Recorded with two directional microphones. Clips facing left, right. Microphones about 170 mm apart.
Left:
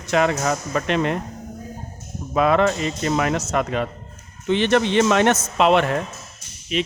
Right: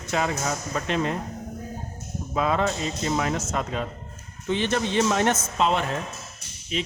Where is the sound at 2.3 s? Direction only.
70° left (ahead or behind).